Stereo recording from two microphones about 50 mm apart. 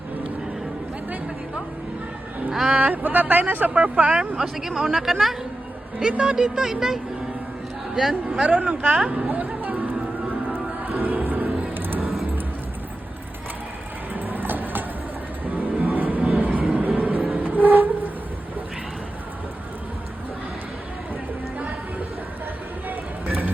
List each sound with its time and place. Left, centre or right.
2.5 s speech: centre
2.7 s speech: right
4.4 s speech: centre
6.0 s speech: centre
8.5 s speech: right
9.0 s a sound: right
10.8 s music: right
14.1 s vehicle: right
15.5 s music: right
17.3 s train: right